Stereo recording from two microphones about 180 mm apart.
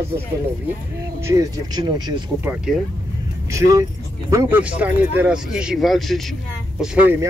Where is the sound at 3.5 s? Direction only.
20° right (ahead or behind); by 6.2 s centre (ahead or behind).